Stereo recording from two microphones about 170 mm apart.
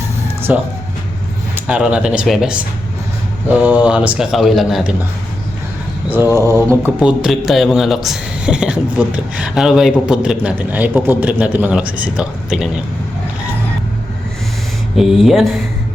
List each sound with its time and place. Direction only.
0.5 s speech: 10° right (ahead or behind)
6.1 s speech: 15° right (ahead or behind)
7.0 s speech: 5° right (ahead or behind)
14.9 s speech: centre (ahead or behind)